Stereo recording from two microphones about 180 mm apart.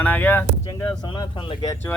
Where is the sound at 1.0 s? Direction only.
25° left (ahead or behind).